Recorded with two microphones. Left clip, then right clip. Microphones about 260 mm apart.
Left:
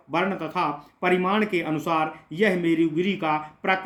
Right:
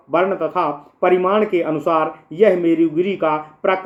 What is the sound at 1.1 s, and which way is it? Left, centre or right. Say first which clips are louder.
Speech: right 6 dB; left.